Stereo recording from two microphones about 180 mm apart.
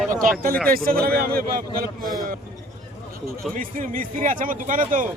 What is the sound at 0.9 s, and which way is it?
A man's voice, 55° right (ahead or behind).